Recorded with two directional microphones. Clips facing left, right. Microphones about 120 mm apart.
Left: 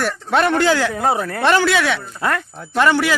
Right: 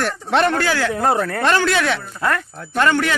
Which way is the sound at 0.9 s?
5° left (ahead or behind).